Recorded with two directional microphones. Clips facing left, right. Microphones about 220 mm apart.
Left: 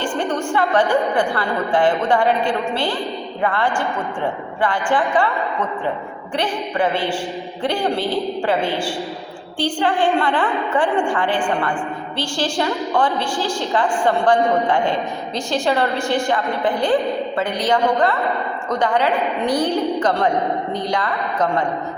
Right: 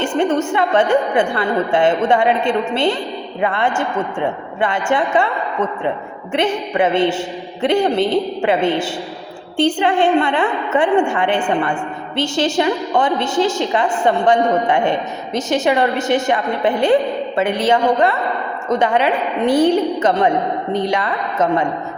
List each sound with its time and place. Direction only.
0.0 s a woman's voice: 25° right (ahead or behind)